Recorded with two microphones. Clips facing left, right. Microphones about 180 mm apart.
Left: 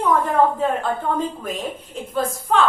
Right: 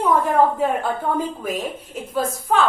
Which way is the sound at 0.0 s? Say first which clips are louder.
Right 1 dB; 10° right (ahead or behind).